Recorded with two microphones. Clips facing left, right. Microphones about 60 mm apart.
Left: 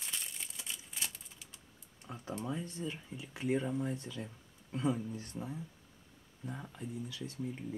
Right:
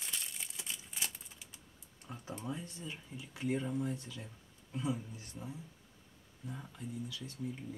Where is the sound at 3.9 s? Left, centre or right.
Left.